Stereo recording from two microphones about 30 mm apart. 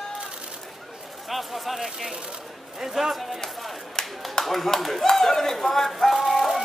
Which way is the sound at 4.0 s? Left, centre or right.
Left.